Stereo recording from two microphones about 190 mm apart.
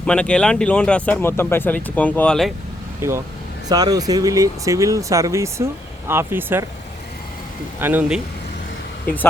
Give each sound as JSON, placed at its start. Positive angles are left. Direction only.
{"t": 0.0, "sound": "speech", "side_deg": 5}
{"t": 3.0, "sound": "speech", "side_deg": -15}
{"t": 7.8, "sound": "speech", "side_deg": -10}